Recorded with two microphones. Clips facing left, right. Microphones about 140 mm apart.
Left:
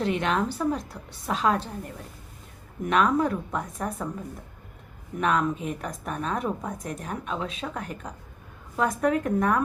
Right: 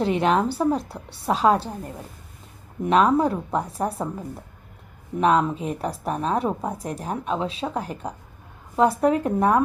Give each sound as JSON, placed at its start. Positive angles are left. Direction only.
{"t": 0.0, "sound": "a woman's voice", "side_deg": -35}
{"t": 5.2, "sound": "a woman's voice", "side_deg": -30}